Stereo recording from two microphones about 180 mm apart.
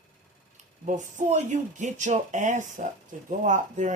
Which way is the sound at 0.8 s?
40° right (ahead or behind).